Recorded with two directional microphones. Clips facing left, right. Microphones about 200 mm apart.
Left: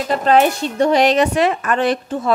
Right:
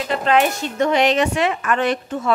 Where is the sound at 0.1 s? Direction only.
40° left (ahead or behind).